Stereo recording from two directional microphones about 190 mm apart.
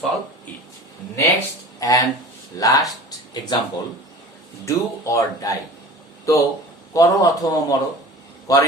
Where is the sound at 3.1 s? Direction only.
20° left (ahead or behind).